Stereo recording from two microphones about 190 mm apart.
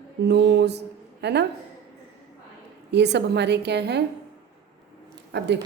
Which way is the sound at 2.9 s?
65° right (ahead or behind).